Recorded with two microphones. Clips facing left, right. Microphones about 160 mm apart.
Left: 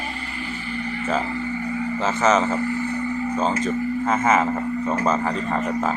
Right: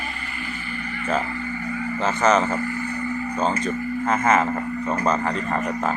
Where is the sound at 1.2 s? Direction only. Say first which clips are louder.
Left 3 dB; 20° left (ahead or behind).